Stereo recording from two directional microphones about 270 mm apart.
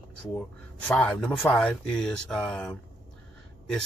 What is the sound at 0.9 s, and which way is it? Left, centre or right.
A man's voice, centre.